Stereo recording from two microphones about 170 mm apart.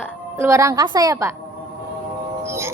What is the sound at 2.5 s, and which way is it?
Music, 15° right (ahead or behind).